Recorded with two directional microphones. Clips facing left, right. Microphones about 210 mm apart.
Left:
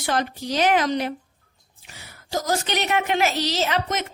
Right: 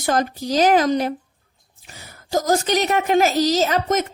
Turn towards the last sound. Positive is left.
turn(degrees=-45)  # may be behind; listen again after turning